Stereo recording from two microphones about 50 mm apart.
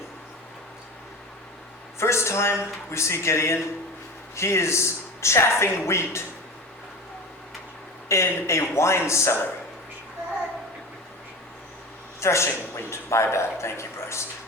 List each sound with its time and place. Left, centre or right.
2.0 s speech: left
8.0 s speech: left
12.2 s speech: left